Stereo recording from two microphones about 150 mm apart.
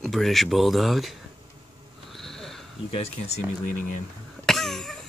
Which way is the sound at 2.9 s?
45° left (ahead or behind).